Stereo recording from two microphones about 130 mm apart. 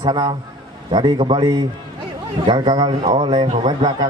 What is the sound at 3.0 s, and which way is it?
Speech, 70° right (ahead or behind).